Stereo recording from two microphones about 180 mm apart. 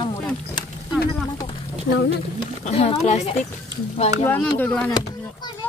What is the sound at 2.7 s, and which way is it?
Speech, 35° left (ahead or behind).